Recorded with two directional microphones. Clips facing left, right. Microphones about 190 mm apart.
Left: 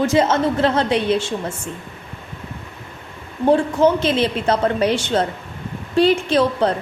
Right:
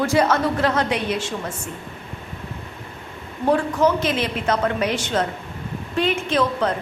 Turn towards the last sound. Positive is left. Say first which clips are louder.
# left 4 dB
turn(degrees=35)  # may be behind; listen again after turning